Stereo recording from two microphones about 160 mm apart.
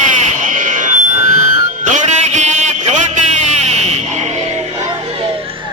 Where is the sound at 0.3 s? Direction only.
55° right (ahead or behind).